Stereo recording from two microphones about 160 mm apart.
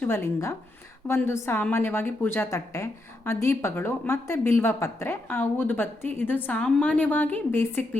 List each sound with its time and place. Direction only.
0.0 s a woman's voice: 15° left (ahead or behind)